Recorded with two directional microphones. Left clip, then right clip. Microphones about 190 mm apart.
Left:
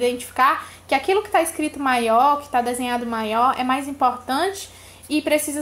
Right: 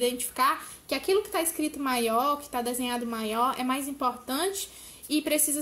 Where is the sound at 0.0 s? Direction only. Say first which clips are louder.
Left 7 dB; 45° right (ahead or behind).